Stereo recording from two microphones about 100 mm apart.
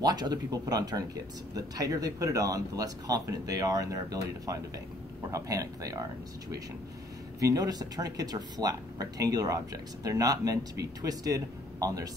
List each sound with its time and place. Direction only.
0.0 s speech: 45° right (ahead or behind)
7.3 s speech: 35° right (ahead or behind)